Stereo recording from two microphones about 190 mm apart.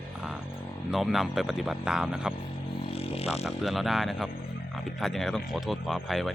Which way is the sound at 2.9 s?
30° left (ahead or behind).